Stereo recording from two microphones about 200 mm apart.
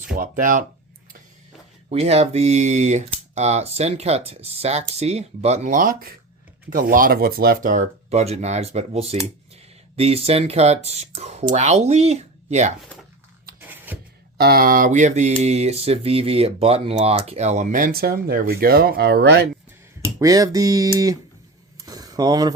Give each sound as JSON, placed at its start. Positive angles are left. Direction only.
{"t": 0.1, "sound": "speech", "side_deg": -40}
{"t": 1.9, "sound": "speech", "side_deg": -30}
{"t": 13.6, "sound": "a sound", "side_deg": -10}
{"t": 14.3, "sound": "speech", "side_deg": -50}
{"t": 20.1, "sound": "speech", "side_deg": -15}
{"t": 21.8, "sound": "a sound", "side_deg": -20}